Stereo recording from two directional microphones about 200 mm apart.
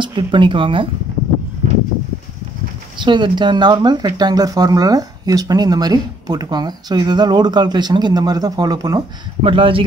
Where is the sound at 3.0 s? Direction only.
25° right (ahead or behind).